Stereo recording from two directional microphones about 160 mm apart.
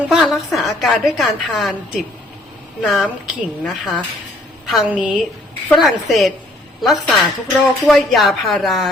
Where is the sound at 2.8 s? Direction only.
Centre (ahead or behind).